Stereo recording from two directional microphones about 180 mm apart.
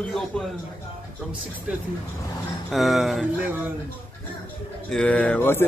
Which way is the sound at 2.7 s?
Centre (ahead or behind).